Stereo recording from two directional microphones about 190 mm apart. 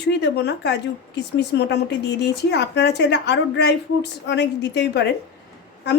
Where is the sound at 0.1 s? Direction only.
60° left (ahead or behind).